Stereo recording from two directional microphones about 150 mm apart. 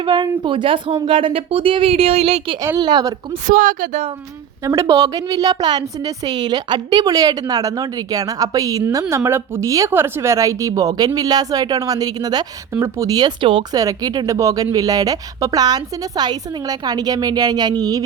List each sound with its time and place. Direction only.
0.0 s speech: 30° right (ahead or behind)
2.6 s a woman's voice: 25° right (ahead or behind)
3.4 s a woman's voice: 65° right (ahead or behind)
4.6 s a woman's voice: 20° right (ahead or behind)
13.7 s a woman's voice: 25° right (ahead or behind)